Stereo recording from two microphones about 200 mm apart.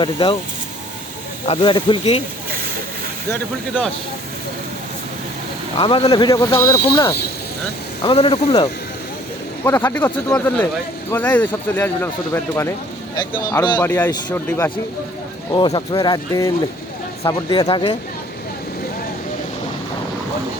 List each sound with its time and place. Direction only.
0.0 s speech: 25° left (ahead or behind)
1.5 s speech: 25° left (ahead or behind)
5.7 s speech: 30° left (ahead or behind)
9.6 s speech: 10° left (ahead or behind)